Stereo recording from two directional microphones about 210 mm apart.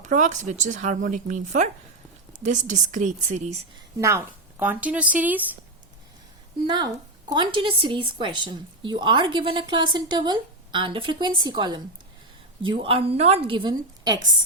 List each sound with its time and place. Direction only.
0.0 s speech: 35° right (ahead or behind)
4.6 s speech: 5° right (ahead or behind)
7.3 s speech: 20° right (ahead or behind)